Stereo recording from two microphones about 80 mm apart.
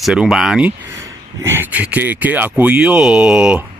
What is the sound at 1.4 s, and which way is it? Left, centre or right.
Speech, right.